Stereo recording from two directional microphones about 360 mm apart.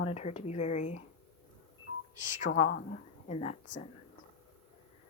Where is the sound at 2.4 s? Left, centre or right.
Left.